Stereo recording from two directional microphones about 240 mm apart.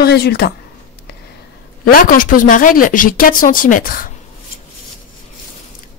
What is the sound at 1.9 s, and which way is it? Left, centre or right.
Speech, left.